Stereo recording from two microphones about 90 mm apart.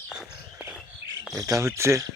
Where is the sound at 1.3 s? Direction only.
35° right (ahead or behind).